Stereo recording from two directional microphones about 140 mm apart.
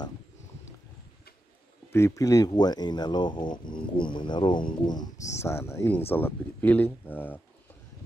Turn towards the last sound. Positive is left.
turn(degrees=15)  # may be behind; listen again after turning